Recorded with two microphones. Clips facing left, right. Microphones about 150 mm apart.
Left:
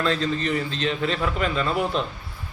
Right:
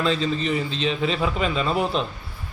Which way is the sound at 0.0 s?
10° right (ahead or behind).